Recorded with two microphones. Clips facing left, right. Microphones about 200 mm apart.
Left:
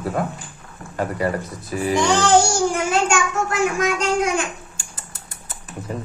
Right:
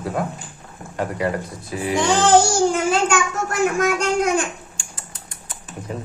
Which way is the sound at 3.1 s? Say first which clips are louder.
Left 1 dB; 50° right (ahead or behind).